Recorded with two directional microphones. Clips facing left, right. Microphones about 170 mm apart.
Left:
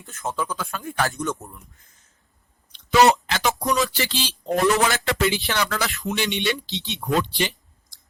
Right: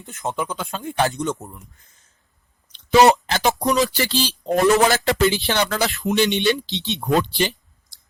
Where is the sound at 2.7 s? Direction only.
30° right (ahead or behind).